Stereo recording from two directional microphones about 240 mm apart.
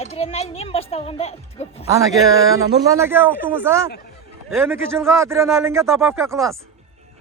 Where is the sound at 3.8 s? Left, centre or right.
Left.